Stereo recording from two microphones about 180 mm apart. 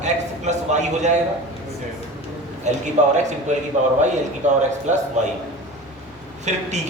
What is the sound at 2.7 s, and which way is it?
Speech, 40° right (ahead or behind).